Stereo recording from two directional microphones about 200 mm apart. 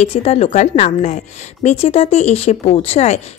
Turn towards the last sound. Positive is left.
turn(degrees=35)  # may be behind; listen again after turning